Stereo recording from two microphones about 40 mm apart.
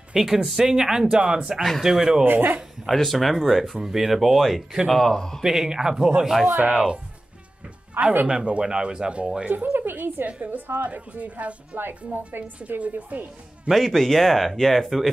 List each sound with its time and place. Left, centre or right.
0.1 s speech: centre
1.8 s speech: centre
2.2 s speech: right
2.9 s speech: centre
5.4 s speech: centre
8.0 s speech: right
8.3 s speech: right
9.5 s speech: right
10.2 s a woman's voice: right
13.7 s speech: centre